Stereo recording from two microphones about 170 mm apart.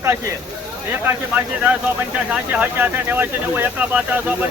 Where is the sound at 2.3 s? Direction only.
10° right (ahead or behind).